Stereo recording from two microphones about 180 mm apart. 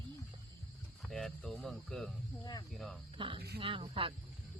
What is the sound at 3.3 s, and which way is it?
Speech, 60° right (ahead or behind).